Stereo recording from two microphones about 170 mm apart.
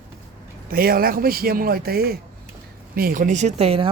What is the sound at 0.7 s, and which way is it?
Speech, 60° right (ahead or behind).